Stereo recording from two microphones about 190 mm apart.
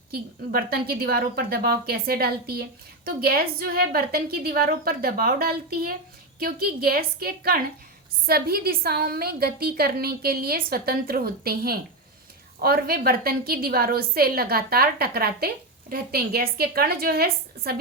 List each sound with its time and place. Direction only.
0.1 s a woman's voice: 55° right (ahead or behind)